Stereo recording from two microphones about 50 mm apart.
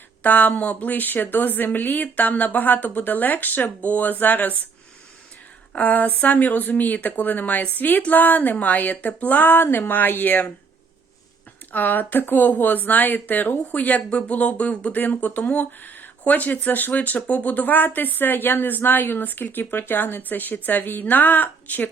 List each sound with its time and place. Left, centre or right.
0.2 s speech: left
5.7 s speech: left
11.7 s speech: left